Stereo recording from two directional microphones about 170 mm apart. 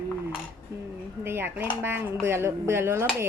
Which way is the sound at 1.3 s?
15° right (ahead or behind).